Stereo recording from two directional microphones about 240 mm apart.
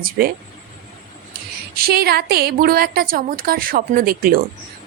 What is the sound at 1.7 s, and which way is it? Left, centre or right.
A woman's voice, right.